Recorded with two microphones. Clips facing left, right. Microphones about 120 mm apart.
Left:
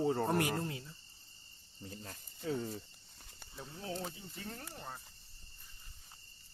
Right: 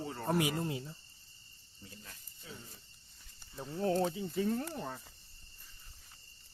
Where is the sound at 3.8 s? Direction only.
70° right (ahead or behind).